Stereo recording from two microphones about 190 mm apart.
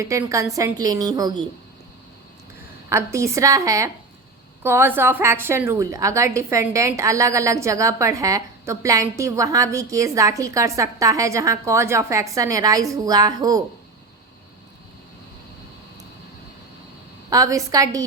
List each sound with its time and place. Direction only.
0.0 s a woman's voice: 15° right (ahead or behind)
2.9 s a woman's voice: 15° right (ahead or behind)
17.2 s a woman's voice: 20° right (ahead or behind)